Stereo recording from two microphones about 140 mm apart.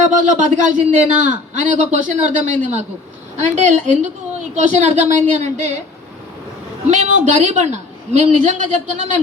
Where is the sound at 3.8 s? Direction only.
55° right (ahead or behind).